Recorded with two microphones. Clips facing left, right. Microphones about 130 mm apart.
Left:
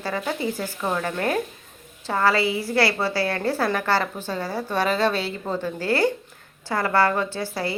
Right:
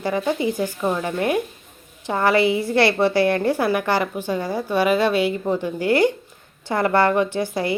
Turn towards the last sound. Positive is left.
turn(degrees=-20)  # may be behind; listen again after turning